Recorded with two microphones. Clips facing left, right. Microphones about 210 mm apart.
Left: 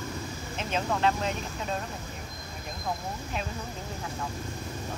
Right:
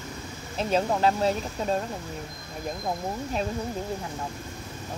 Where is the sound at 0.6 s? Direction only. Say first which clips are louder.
Right 5 dB; 35° right (ahead or behind).